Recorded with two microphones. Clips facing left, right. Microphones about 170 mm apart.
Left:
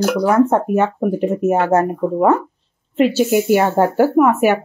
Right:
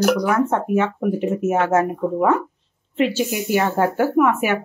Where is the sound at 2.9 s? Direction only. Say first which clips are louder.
Left 6 dB; 45° left (ahead or behind).